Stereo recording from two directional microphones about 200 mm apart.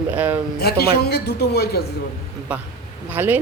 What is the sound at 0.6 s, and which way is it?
A woman's voice, 55° left (ahead or behind).